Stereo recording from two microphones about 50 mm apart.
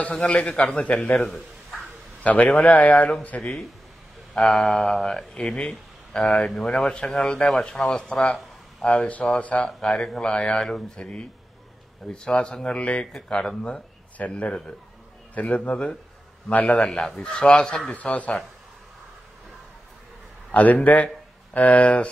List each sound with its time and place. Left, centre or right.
0.0 s a man's voice: left
2.2 s a man's voice: left
4.3 s a man's voice: centre; by 9.7 s left
9.8 s speech: centre
10.3 s a man's voice: left
13.0 s a man's voice: centre
16.8 s speech: centre
17.9 s speech: left
20.5 s speech: left